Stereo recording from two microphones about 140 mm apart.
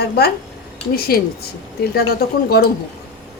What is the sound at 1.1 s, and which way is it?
Speech, 90° left.